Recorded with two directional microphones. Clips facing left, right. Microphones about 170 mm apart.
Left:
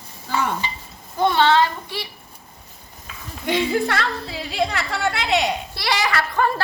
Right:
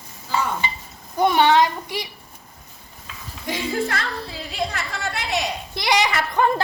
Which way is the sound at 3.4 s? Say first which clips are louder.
Left 4 dB; 70° left (ahead or behind).